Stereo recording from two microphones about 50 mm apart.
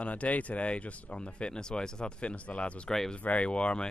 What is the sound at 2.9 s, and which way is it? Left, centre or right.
Speech, centre.